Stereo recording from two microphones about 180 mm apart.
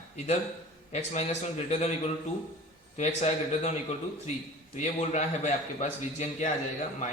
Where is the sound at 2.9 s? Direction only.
40° left (ahead or behind).